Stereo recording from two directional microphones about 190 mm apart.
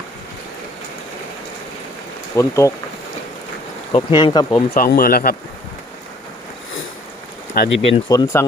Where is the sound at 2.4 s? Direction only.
15° left (ahead or behind).